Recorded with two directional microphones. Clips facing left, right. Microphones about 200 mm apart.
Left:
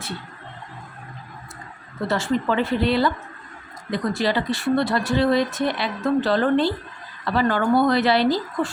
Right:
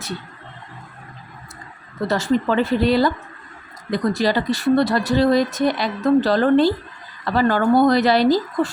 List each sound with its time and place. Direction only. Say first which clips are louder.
2.0 s speech: right 3 dB; 40° right (ahead or behind)